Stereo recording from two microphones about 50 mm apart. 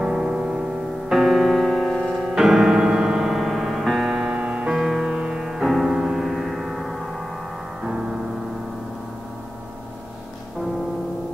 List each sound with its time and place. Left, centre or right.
0.0 s music: centre
1.2 s music: centre
4.1 s music: centre
7.8 s music: centre